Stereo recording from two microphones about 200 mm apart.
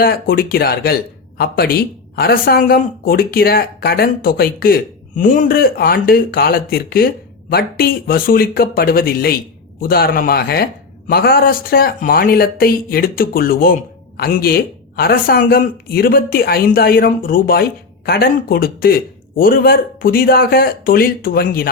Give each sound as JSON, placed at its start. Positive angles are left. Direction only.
{"t": 0.0, "sound": "a woman's voice", "side_deg": 50}